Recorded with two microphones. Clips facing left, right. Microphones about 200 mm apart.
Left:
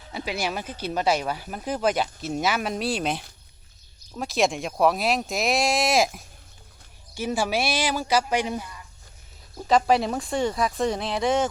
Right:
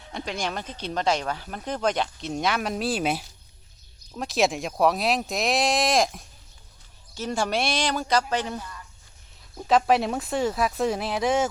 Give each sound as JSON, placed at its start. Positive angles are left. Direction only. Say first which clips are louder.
{"t": 0.1, "sound": "speech", "louder": "left 1 dB", "side_deg": 5}
{"t": 9.6, "sound": "speech", "louder": "even", "side_deg": 0}